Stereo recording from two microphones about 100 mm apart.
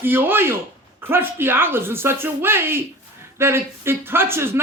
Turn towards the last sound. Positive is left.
turn(degrees=-25)  # may be behind; listen again after turning